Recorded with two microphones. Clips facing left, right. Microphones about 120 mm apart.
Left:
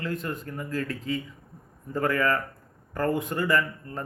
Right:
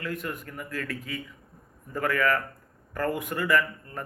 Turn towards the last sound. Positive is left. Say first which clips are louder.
# even
turn(degrees=30)  # may be behind; listen again after turning